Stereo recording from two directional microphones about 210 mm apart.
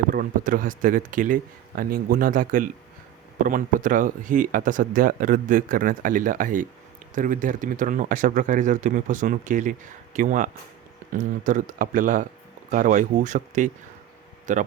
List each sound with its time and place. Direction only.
0.1 s speech: 40° right (ahead or behind)